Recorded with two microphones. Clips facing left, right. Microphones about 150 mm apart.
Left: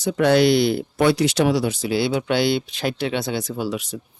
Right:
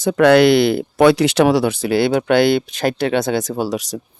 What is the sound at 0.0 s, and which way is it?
Speech, 70° right (ahead or behind).